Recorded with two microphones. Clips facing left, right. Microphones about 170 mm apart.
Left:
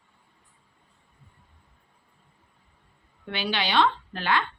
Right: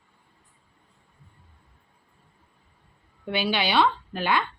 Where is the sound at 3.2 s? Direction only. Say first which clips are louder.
Right 3 dB; 10° right (ahead or behind).